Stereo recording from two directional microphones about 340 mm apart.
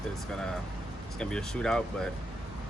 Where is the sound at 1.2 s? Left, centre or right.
Centre.